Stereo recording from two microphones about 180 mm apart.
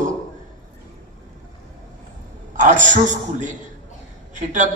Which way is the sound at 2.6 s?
45° right (ahead or behind).